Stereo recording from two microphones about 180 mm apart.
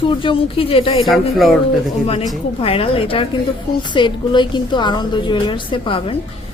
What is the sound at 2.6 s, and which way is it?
A woman's voice, 30° left (ahead or behind).